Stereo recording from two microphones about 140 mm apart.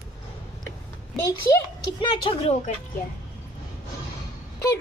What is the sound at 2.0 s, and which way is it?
Speech, 40° left (ahead or behind).